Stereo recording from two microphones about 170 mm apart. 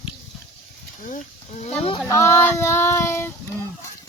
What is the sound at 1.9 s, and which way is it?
Speech, 20° left (ahead or behind).